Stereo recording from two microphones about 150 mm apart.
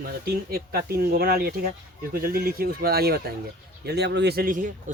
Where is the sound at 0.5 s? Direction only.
90° right.